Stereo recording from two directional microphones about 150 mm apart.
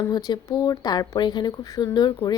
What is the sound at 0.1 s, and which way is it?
A woman's voice, 25° left (ahead or behind).